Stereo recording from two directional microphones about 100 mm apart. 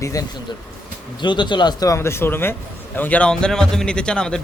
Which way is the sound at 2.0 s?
25° left (ahead or behind).